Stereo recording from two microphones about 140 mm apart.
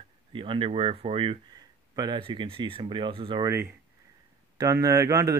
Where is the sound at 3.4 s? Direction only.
20° right (ahead or behind).